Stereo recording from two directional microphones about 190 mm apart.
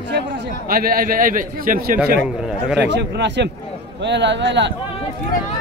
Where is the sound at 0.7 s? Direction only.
50° right (ahead or behind).